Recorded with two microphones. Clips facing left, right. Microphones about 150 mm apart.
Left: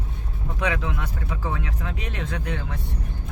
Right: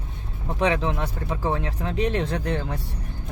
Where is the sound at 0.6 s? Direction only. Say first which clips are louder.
Right 4 dB; 30° right (ahead or behind).